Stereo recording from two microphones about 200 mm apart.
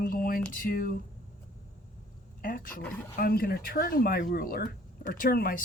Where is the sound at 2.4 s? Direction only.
45° left (ahead or behind).